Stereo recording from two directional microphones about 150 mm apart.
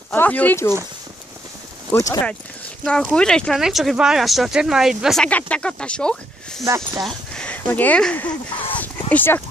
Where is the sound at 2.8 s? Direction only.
5° left (ahead or behind).